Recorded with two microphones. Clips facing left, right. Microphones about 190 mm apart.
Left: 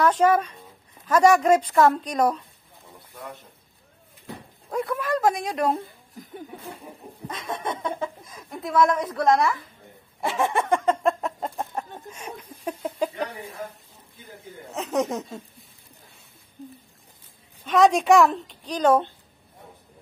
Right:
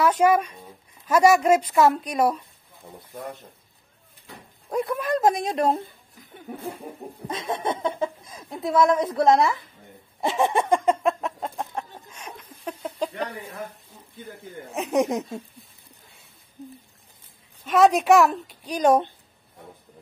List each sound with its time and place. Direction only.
0.0 s speech: 10° right (ahead or behind)
4.6 s speech: 20° right (ahead or behind)
7.2 s speech: 30° right (ahead or behind); by 11.0 s 15° right (ahead or behind)
11.0 s chicken: centre (ahead or behind)
12.1 s a sound: 10° left (ahead or behind)
14.7 s speech: 15° right (ahead or behind)
17.6 s a woman's voice: centre (ahead or behind)